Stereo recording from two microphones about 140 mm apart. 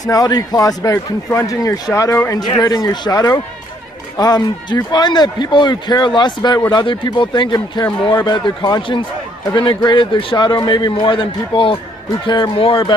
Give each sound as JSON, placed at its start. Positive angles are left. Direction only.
{"t": 0.0, "sound": "a man's voice", "side_deg": 25}